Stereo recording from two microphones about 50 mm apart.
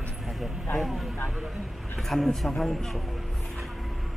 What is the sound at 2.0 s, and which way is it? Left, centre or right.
Speech, centre.